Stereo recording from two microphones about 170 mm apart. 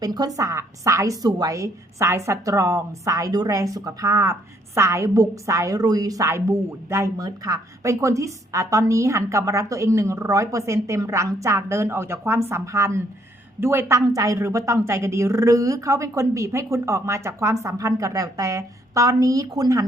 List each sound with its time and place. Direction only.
0.0 s a woman's voice: 25° right (ahead or behind)